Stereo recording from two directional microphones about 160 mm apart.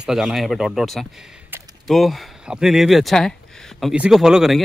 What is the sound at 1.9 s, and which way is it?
Speech, centre (ahead or behind).